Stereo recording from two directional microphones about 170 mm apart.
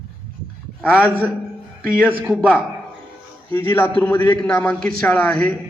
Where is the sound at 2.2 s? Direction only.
5° right (ahead or behind).